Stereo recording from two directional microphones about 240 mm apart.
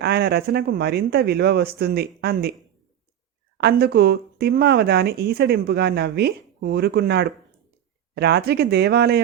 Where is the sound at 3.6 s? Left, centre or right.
Right.